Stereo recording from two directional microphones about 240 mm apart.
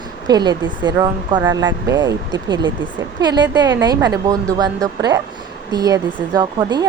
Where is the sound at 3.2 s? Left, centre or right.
Centre.